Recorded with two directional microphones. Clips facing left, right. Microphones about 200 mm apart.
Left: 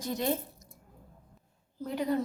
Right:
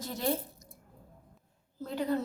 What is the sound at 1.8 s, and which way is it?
Speech, 15° left (ahead or behind).